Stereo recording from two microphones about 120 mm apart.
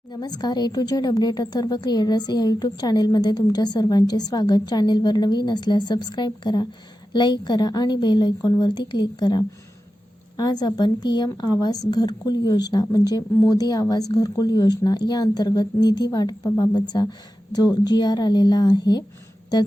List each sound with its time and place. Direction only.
0.1 s speech: 35° left (ahead or behind)